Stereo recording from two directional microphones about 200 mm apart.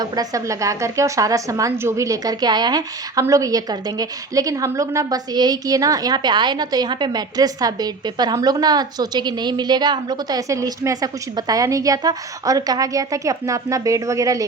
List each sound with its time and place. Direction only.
0.0 s a woman's voice: 15° right (ahead or behind)